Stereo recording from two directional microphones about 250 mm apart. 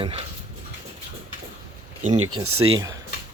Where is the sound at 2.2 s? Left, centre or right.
Right.